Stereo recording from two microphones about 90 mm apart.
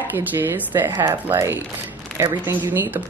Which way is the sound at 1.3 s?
30° right (ahead or behind).